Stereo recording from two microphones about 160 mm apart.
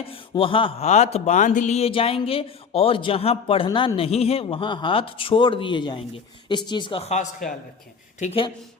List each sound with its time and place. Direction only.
0.0 s speech: 35° left (ahead or behind)
0.9 s speech: 45° left (ahead or behind)
8.2 s speech: 35° left (ahead or behind)